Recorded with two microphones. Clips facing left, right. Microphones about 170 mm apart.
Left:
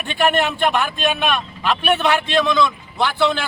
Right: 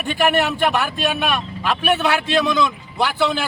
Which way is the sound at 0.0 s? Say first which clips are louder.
Even; 5° right (ahead or behind).